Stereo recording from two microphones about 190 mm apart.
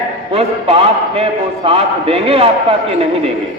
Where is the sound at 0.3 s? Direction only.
30° right (ahead or behind).